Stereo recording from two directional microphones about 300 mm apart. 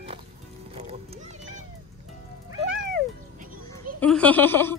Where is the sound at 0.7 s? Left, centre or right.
Centre.